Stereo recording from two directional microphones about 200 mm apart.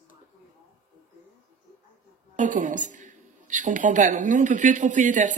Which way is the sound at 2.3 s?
40° right (ahead or behind).